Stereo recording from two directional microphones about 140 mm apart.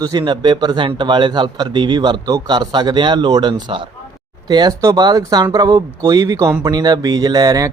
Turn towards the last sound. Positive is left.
turn(degrees=-25)  # may be behind; listen again after turning